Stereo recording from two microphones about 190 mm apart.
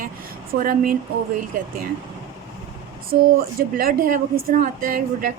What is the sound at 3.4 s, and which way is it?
A woman's voice, 50° right (ahead or behind).